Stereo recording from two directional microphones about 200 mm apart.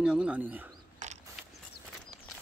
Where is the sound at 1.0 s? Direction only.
35° right (ahead or behind).